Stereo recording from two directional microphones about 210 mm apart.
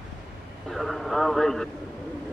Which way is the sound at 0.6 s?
Centre (ahead or behind).